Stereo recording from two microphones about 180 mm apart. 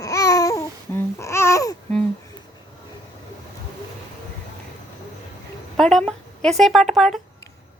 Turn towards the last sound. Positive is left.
turn(degrees=0)  # may be behind; listen again after turning